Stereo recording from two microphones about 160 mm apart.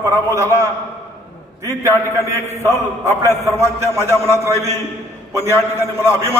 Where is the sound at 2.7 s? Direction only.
15° left (ahead or behind).